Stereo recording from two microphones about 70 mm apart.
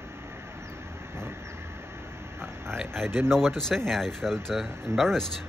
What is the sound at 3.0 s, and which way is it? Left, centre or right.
Speech, right.